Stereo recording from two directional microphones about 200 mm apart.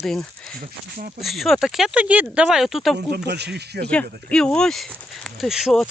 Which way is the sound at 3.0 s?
55° right (ahead or behind).